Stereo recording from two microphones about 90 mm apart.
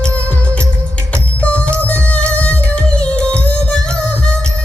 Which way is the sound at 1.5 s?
15° left (ahead or behind).